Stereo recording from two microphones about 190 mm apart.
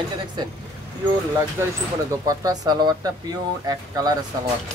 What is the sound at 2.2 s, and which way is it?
Speech, 20° right (ahead or behind).